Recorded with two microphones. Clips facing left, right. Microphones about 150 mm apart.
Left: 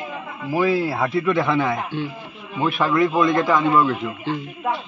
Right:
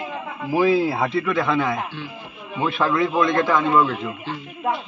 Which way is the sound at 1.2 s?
20° left (ahead or behind).